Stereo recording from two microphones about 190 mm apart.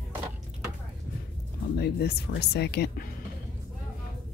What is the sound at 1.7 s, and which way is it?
Speech, 55° left (ahead or behind).